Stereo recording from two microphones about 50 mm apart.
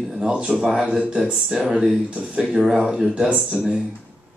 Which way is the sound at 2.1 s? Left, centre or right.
Right.